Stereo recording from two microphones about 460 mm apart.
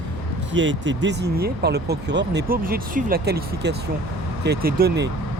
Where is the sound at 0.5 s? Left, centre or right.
Right.